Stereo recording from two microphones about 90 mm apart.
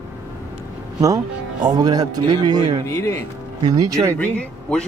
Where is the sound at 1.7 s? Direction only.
45° right (ahead or behind).